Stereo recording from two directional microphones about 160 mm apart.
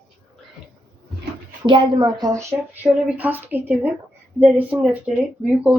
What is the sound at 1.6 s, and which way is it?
Speech, 30° right (ahead or behind).